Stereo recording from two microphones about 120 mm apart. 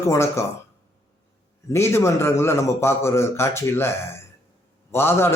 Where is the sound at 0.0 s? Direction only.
25° left (ahead or behind).